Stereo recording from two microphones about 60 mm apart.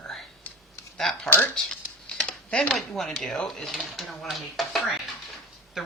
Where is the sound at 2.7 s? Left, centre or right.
Centre.